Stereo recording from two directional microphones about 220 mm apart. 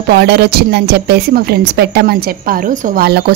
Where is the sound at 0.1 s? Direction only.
45° right (ahead or behind).